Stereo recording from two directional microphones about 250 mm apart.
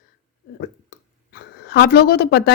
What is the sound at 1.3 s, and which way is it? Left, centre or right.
Speech, left.